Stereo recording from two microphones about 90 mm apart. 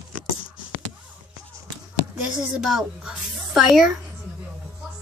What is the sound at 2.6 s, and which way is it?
Speech, 5° right (ahead or behind).